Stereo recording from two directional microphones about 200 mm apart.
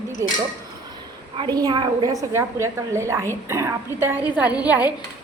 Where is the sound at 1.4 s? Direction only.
20° right (ahead or behind).